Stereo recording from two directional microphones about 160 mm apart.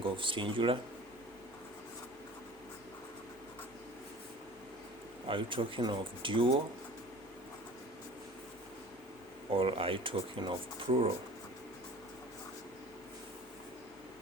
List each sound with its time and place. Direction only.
0.0 s speech: 30° right (ahead or behind)
5.3 s speech: 30° right (ahead or behind)
9.5 s speech: 35° right (ahead or behind)